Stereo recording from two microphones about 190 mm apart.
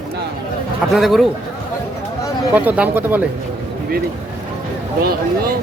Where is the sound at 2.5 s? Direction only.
10° right (ahead or behind).